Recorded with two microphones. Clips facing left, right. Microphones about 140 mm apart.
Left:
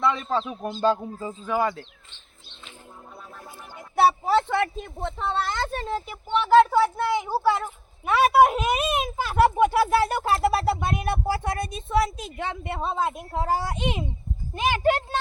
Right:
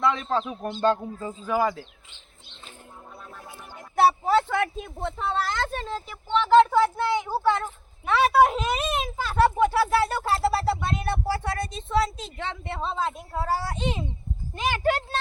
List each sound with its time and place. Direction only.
0.0 s speech: centre (ahead or behind)
3.9 s speech: centre (ahead or behind); by 15.2 s 15° left (ahead or behind)